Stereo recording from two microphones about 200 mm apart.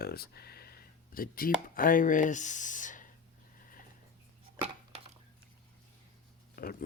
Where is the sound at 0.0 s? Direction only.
50° left (ahead or behind).